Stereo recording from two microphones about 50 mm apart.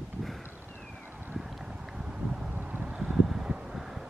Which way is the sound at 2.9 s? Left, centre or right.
Right.